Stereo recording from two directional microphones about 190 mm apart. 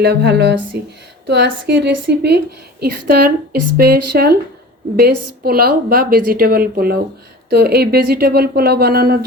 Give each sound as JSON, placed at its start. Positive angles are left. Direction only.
{"t": 0.0, "sound": "a woman's voice", "side_deg": -60}